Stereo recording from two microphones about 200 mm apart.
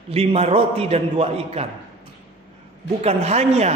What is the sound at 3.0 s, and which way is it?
Speech, 35° right (ahead or behind).